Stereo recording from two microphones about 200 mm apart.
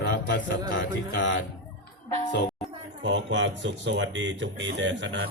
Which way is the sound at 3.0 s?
70° right (ahead or behind).